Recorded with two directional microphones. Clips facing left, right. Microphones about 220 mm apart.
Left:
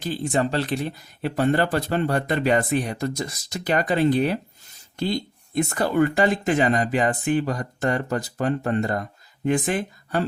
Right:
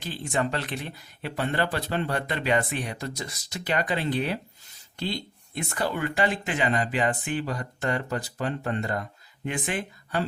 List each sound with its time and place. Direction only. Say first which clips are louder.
0.0 s speech: left 5 dB; 40° left (ahead or behind)